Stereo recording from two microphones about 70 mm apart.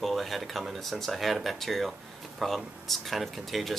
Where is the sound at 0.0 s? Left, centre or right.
Centre.